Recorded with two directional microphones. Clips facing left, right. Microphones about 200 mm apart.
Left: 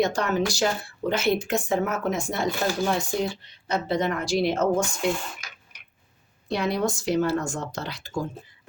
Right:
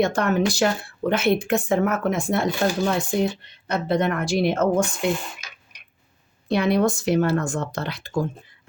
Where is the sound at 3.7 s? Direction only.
55° right (ahead or behind).